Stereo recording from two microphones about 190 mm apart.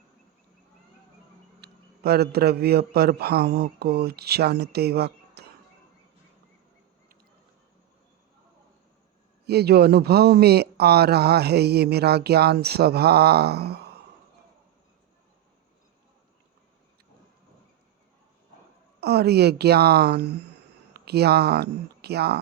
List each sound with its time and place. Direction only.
1.6 s speech: 55° right (ahead or behind)
9.5 s speech: 55° right (ahead or behind)
18.9 s speech: 60° right (ahead or behind)